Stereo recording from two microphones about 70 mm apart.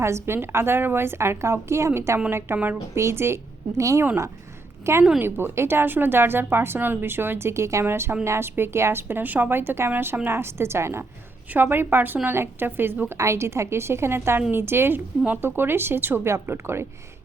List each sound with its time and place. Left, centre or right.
0.0 s a woman's voice: right
13.1 s a woman's voice: right